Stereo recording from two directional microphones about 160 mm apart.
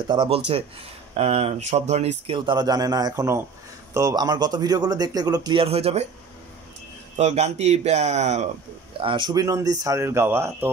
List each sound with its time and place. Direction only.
0.1 s speech: 30° right (ahead or behind)
7.2 s speech: 45° right (ahead or behind)
9.0 s speech: 30° right (ahead or behind); by 10.7 s 15° right (ahead or behind)